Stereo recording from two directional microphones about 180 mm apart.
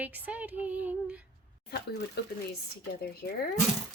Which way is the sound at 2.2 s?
65° left (ahead or behind).